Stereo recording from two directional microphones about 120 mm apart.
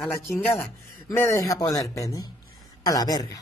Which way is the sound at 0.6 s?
20° left (ahead or behind).